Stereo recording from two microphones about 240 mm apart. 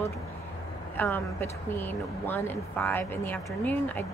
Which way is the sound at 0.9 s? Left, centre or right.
Centre.